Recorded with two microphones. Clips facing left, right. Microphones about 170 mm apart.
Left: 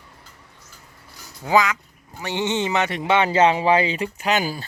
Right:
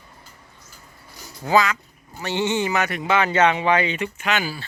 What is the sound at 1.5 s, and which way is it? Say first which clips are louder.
Speech: even; 15° left (ahead or behind).